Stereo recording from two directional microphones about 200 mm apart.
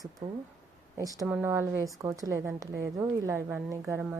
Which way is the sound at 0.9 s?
15° right (ahead or behind).